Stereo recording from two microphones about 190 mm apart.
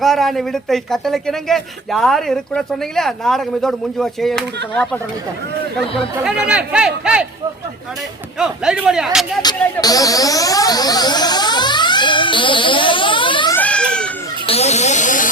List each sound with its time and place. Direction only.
0.0 s speech: centre (ahead or behind)
6.2 s speech: 5° right (ahead or behind)
8.4 s speech: 5° right (ahead or behind)
9.4 s speech: 20° left (ahead or behind)
13.5 s baby cry: 5° left (ahead or behind)
14.4 s a sound: 35° left (ahead or behind)